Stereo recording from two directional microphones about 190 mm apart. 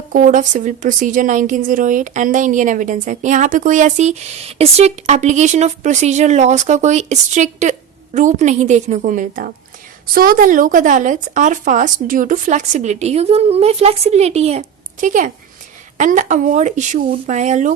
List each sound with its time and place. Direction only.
0.1 s a woman's voice: 45° right (ahead or behind)